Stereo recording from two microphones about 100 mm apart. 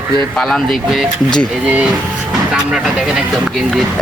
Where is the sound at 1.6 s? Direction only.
10° right (ahead or behind).